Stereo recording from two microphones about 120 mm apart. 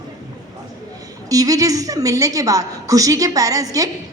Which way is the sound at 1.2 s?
30° right (ahead or behind).